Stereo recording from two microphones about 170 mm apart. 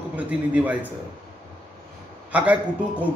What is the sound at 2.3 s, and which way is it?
Speech, 10° right (ahead or behind).